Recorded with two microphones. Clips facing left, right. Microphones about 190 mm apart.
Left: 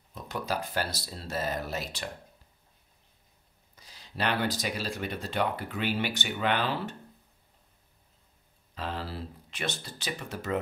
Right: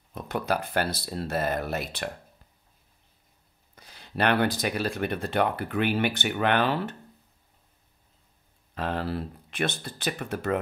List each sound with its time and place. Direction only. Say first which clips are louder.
0.1 s speech: right 5 dB; 60° right (ahead or behind)
3.7 s speech: right 7 dB; 60° right (ahead or behind)
8.7 s speech: right 6 dB; 55° right (ahead or behind)